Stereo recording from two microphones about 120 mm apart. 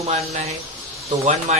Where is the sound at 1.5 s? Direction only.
75° right (ahead or behind).